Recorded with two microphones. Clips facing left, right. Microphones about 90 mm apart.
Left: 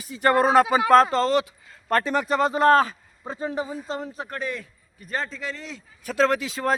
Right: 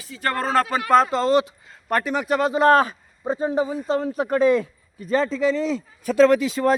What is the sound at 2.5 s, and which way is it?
A man's voice, 20° right (ahead or behind).